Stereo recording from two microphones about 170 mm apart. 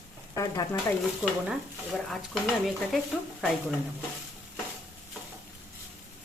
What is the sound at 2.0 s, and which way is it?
Speech, centre (ahead or behind).